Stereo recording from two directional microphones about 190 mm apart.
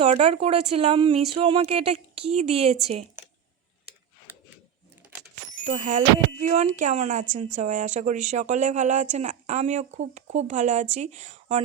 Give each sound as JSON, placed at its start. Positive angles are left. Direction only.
{"t": 0.0, "sound": "a woman's voice", "side_deg": -35}
{"t": 4.3, "sound": "a sound", "side_deg": -10}
{"t": 5.6, "sound": "a woman's voice", "side_deg": -40}